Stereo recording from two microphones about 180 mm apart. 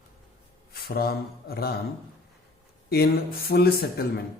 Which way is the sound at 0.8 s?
60° left (ahead or behind).